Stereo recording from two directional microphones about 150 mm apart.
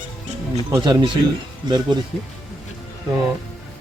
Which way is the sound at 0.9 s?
30° right (ahead or behind).